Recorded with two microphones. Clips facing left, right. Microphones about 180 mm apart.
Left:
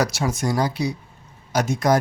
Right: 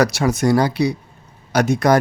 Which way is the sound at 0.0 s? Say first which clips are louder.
Right 6 dB; 65° right (ahead or behind).